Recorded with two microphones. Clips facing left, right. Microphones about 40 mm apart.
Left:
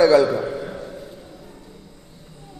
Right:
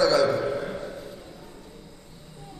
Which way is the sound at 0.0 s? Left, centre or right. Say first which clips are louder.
Left 6 dB; left.